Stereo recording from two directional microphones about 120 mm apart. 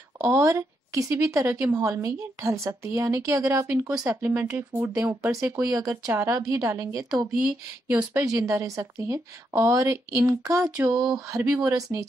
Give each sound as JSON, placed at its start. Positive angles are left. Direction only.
{"t": 0.2, "sound": "a woman's voice", "side_deg": -25}